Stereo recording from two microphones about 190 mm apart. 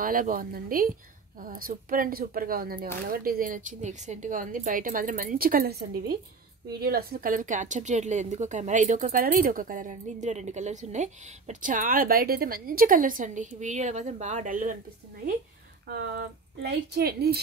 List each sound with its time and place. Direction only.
0.0 s a woman's voice: 45° right (ahead or behind)
15.9 s speech: 55° right (ahead or behind)